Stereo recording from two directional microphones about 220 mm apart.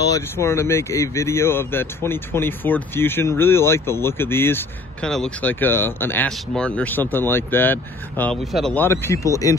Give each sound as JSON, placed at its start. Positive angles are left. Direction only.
{"t": 0.1, "sound": "speech", "side_deg": 10}